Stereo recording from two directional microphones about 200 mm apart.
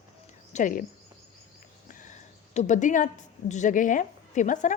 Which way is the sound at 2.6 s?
40° left (ahead or behind).